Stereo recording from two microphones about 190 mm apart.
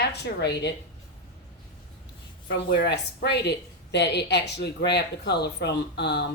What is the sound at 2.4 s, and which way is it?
Speech, 60° left (ahead or behind).